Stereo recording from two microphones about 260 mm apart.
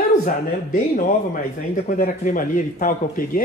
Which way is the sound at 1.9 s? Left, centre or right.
Left.